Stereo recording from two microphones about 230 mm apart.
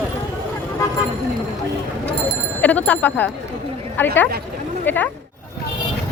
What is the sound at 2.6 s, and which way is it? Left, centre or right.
Speech, centre.